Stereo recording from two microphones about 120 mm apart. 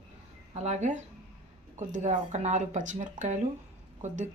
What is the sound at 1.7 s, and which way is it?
Speech, 85° right.